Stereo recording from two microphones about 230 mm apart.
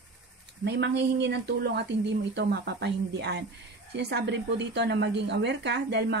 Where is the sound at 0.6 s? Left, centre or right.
Right.